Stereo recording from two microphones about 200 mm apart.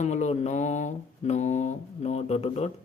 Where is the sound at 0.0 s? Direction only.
35° left (ahead or behind).